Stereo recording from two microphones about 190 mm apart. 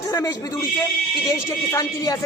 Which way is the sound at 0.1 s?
15° left (ahead or behind).